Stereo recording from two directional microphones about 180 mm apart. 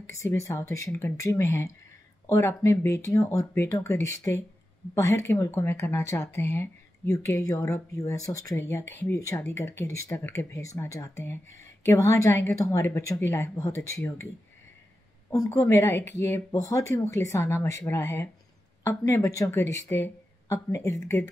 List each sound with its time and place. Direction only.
0.0 s speech: 15° left (ahead or behind)
15.2 s speech: 15° left (ahead or behind)